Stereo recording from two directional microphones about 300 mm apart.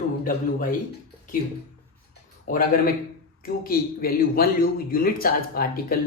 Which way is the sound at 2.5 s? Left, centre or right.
Left.